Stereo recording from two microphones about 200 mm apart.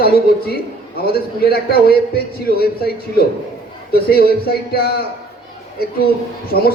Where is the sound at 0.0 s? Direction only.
50° left (ahead or behind).